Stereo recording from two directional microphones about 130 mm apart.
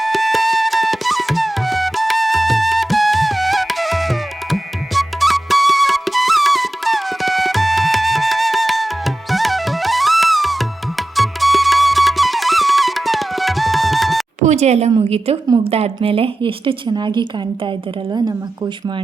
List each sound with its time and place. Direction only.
0.0 s flute: centre (ahead or behind)
14.4 s a sound: 60° right (ahead or behind)
14.9 s a woman's voice: 50° right (ahead or behind); by 18.3 s 35° right (ahead or behind)